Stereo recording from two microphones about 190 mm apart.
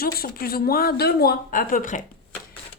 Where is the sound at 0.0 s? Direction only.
50° left (ahead or behind).